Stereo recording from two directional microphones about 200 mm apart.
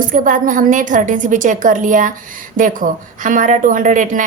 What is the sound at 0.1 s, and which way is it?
A woman's voice, 40° right (ahead or behind).